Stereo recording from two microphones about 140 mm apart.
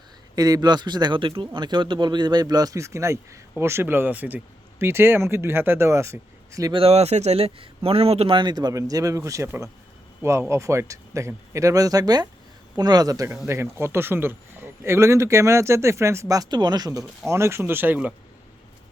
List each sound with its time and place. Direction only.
0.3 s speech: 25° right (ahead or behind)
6.7 s speech: 45° right (ahead or behind); by 18.1 s 15° right (ahead or behind)